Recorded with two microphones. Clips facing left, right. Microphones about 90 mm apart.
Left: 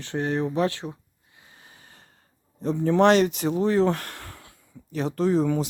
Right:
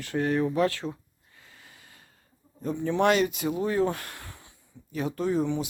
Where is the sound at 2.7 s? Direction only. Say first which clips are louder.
Left 5 dB; 45° left (ahead or behind).